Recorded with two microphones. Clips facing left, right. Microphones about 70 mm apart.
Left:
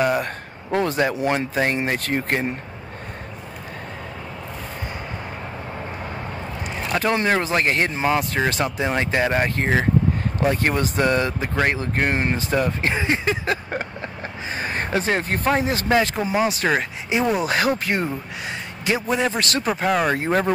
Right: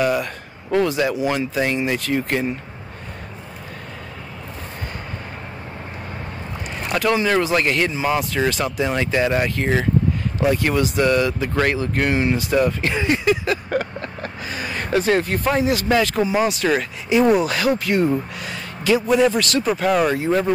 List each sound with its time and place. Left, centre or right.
0.0 s speech: left
6.9 s speech: left
12.6 s vehicle: left
15.3 s speech: left
15.9 s speech: left
19.8 s speech: left
20.1 s speech: left